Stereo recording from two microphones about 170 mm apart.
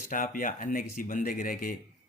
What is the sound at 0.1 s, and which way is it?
Speech, 55° left (ahead or behind).